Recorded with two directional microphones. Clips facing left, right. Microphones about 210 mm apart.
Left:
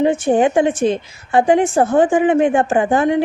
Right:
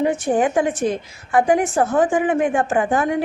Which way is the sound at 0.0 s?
25° left (ahead or behind).